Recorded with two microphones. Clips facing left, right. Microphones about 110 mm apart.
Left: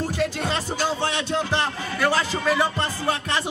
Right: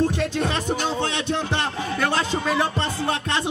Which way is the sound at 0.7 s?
20° right (ahead or behind).